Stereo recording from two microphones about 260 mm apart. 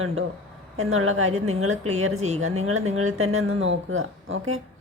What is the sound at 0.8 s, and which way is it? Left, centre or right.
A woman's voice, right.